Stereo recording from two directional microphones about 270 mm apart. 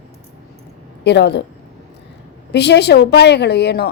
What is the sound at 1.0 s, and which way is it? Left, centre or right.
Speech, left.